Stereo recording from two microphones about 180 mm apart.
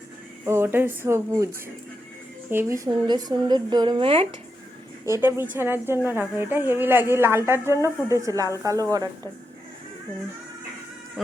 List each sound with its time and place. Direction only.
0.4 s speech: 15° right (ahead or behind)
2.5 s speech: 15° right (ahead or behind); by 4.3 s 30° right (ahead or behind)
5.2 s speech: 10° right (ahead or behind)